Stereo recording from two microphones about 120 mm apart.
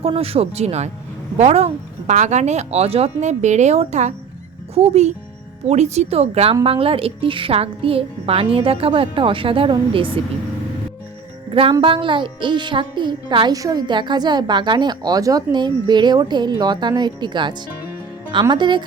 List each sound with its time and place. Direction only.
0.0 s a woman's voice: 55° right (ahead or behind)
11.7 s speech: 45° right (ahead or behind)